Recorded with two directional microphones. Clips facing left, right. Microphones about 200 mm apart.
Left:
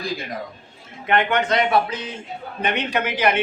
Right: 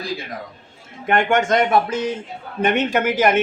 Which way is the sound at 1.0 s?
45° right (ahead or behind).